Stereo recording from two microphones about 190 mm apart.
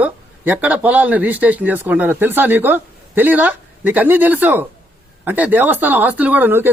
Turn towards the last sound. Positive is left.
turn(degrees=-10)  # may be behind; listen again after turning